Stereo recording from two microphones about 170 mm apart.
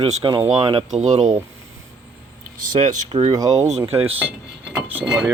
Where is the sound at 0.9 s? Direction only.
45° right (ahead or behind).